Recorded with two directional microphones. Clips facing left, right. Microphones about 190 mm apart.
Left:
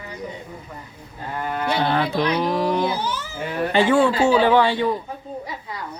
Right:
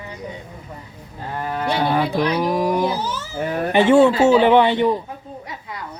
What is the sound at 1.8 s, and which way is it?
Speech, 10° right (ahead or behind).